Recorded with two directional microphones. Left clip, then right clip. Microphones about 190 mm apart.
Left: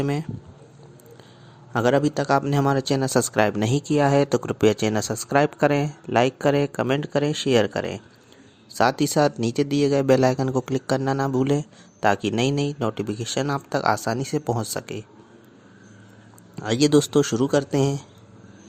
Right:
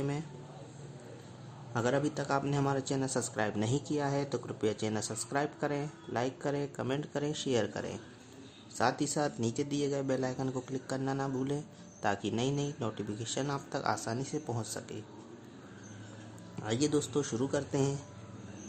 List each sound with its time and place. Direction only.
1.7 s speech: 40° left (ahead or behind)
16.6 s speech: 45° left (ahead or behind)